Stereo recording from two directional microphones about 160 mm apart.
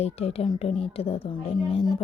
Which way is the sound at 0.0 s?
40° left (ahead or behind).